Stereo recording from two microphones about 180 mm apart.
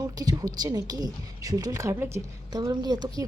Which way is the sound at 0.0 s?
20° right (ahead or behind).